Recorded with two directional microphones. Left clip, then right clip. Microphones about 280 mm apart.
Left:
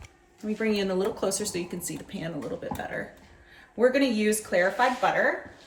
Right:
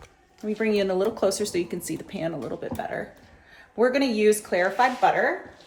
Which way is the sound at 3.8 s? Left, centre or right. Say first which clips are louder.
Right 1 dB; centre.